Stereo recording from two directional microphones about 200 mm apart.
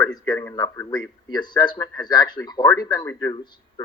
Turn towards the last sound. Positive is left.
turn(degrees=15)  # may be behind; listen again after turning